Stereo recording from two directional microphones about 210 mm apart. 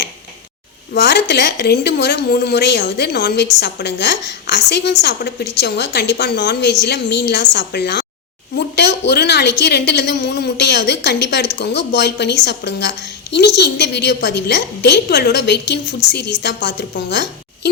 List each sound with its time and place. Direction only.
0.9 s a woman's voice: 55° left (ahead or behind)